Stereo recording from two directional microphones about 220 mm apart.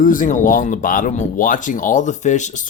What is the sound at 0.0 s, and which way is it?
Speech, 35° left (ahead or behind).